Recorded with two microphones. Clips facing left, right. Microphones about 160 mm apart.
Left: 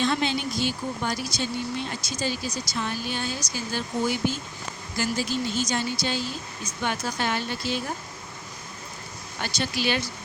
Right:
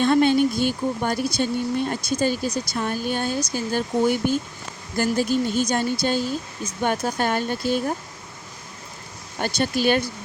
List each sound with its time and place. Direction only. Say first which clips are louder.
0.0 s speech: right 8 dB; 50° right (ahead or behind)
9.4 s speech: right 6 dB; 50° right (ahead or behind)